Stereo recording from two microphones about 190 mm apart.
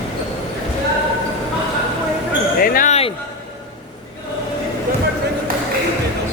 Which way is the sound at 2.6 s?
50° left (ahead or behind).